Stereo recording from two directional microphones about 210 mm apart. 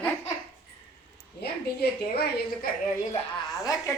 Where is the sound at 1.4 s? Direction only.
50° left (ahead or behind).